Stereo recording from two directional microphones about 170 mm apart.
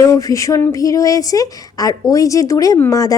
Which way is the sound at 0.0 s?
20° left (ahead or behind).